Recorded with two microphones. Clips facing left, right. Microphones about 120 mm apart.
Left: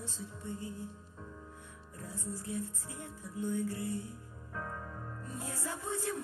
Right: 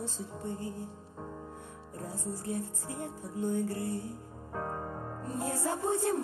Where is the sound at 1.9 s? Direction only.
45° right (ahead or behind).